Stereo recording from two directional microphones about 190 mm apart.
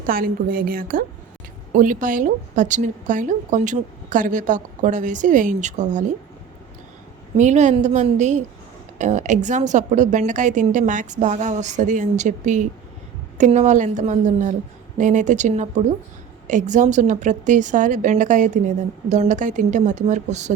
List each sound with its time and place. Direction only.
0.1 s a woman's voice: 50° right (ahead or behind)
7.3 s a woman's voice: 40° right (ahead or behind)